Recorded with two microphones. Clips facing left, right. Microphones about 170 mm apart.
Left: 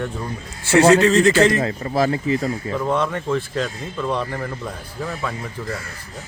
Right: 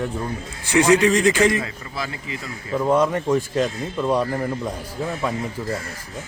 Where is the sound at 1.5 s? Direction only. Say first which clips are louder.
Left 8 dB; 45° left (ahead or behind).